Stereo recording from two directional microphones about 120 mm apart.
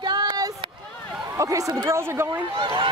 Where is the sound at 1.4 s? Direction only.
25° right (ahead or behind).